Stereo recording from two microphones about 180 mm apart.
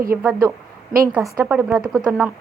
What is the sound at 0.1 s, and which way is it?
A woman's voice, 15° right (ahead or behind).